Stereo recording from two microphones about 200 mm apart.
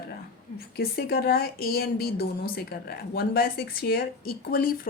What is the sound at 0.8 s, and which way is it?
Speech, 50° left (ahead or behind).